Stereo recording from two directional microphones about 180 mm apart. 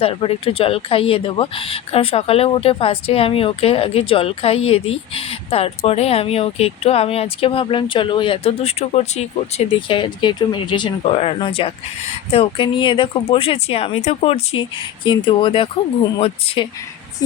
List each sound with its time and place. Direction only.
0.0 s speech: 30° left (ahead or behind)